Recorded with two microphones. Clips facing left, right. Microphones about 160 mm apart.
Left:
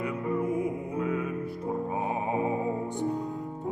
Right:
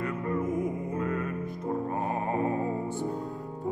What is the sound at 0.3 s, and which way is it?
Music, 5° left (ahead or behind).